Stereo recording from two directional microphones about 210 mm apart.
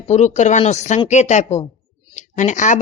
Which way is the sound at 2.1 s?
35° left (ahead or behind).